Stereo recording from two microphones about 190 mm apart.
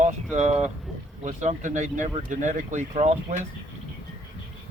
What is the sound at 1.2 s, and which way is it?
Speech, 35° right (ahead or behind).